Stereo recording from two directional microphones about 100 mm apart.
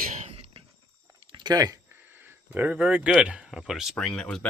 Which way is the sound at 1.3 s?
45° right (ahead or behind).